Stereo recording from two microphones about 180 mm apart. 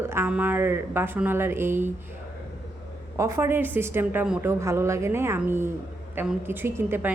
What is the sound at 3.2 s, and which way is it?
A woman's voice, 15° right (ahead or behind).